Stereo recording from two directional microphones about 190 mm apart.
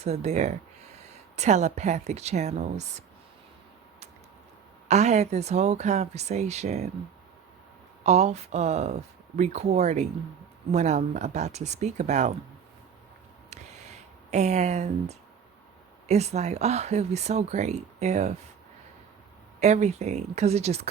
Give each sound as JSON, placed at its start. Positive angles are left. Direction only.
{"t": 0.0, "sound": "speech", "side_deg": -35}
{"t": 4.9, "sound": "speech", "side_deg": -35}
{"t": 8.0, "sound": "speech", "side_deg": -35}
{"t": 14.3, "sound": "speech", "side_deg": -35}
{"t": 19.5, "sound": "speech", "side_deg": -35}